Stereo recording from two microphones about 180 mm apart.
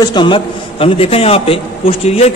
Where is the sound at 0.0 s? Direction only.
25° left (ahead or behind).